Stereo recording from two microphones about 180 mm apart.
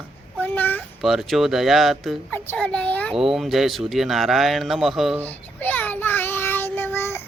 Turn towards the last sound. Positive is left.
turn(degrees=15)  # may be behind; listen again after turning